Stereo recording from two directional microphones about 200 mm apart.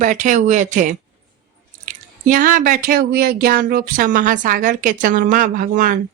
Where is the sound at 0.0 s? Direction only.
40° right (ahead or behind).